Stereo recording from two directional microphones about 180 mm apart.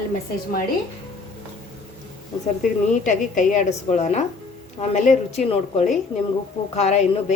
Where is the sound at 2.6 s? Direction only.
45° left (ahead or behind).